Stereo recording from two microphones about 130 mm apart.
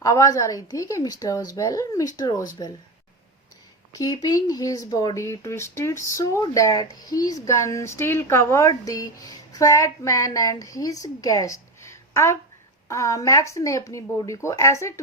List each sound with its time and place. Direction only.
0.0 s speech: 25° left (ahead or behind)
3.9 s speech: 30° left (ahead or behind)